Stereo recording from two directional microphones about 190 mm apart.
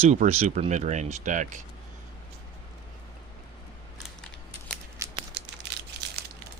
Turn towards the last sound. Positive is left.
turn(degrees=-15)  # may be behind; listen again after turning